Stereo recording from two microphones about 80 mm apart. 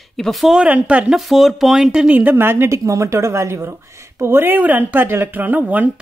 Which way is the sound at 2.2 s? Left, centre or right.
Right.